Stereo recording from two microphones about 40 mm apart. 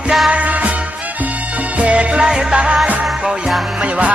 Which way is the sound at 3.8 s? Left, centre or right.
Right.